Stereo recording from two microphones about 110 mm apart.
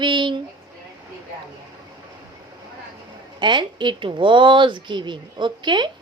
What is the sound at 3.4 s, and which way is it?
A woman's voice, 45° right (ahead or behind).